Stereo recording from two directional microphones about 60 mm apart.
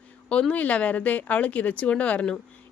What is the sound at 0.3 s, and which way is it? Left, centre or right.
Speech, left.